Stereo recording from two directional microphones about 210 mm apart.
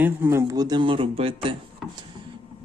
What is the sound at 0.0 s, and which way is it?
Speech, 10° right (ahead or behind).